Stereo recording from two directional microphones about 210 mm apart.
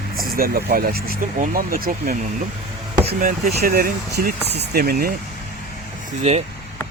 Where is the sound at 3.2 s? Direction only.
45° right (ahead or behind).